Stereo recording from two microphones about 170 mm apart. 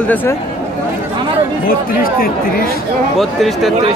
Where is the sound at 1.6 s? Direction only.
60° left (ahead or behind).